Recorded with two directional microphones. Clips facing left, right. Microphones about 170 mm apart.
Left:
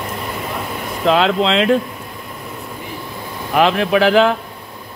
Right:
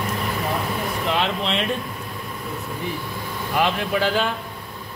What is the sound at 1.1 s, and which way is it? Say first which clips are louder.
Speech: left 11 dB; 90° left.